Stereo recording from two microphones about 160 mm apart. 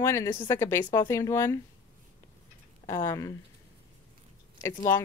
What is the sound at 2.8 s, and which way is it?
Speech, 20° left (ahead or behind).